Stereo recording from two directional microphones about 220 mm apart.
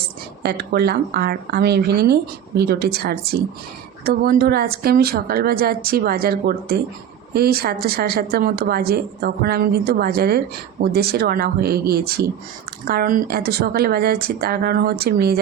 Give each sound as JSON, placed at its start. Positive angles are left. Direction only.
{"t": 0.4, "sound": "a woman's voice", "side_deg": -45}